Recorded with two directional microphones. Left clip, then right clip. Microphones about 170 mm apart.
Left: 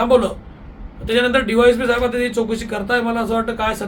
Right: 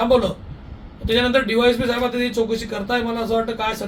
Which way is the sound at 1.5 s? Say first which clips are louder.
Left 4 dB; 10° left (ahead or behind).